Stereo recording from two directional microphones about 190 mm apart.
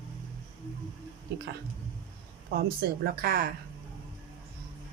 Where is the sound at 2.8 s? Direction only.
55° right (ahead or behind).